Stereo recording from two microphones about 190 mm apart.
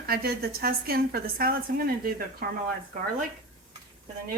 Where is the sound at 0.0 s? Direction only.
55° right (ahead or behind).